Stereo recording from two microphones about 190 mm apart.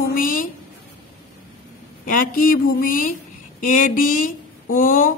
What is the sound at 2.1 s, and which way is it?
A woman's voice, 45° left (ahead or behind).